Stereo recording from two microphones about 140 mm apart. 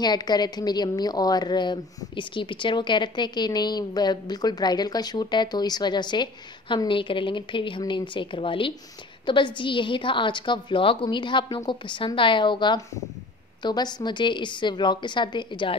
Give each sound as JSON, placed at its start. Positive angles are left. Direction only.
{"t": 0.0, "sound": "a woman's voice", "side_deg": 30}